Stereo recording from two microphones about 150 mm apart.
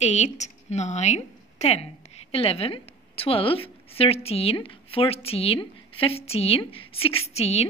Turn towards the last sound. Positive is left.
turn(degrees=45)  # may be behind; listen again after turning